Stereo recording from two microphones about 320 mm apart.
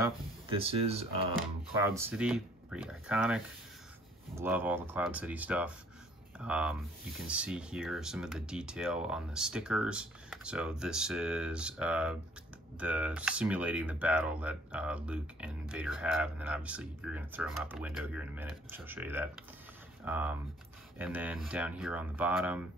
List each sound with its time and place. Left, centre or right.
0.0 s speech: centre
2.0 s speech: centre